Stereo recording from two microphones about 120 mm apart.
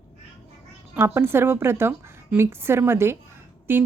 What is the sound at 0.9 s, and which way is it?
A woman's voice, 15° right (ahead or behind).